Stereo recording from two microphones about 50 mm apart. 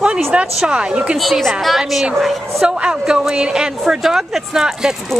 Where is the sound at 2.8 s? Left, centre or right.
Centre.